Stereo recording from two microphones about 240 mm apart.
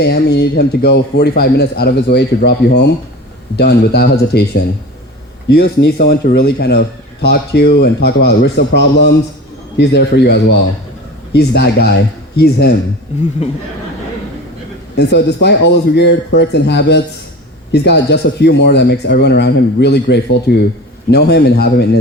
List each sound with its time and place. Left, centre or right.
0.0 s a man's voice: left
5.5 s a man's voice: left
13.4 s speech: left
14.9 s a man's voice: left